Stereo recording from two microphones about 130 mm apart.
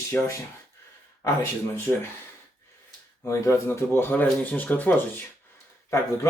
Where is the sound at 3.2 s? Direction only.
20° left (ahead or behind).